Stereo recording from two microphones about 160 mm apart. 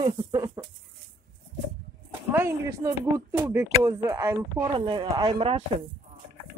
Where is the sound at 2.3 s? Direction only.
15° right (ahead or behind).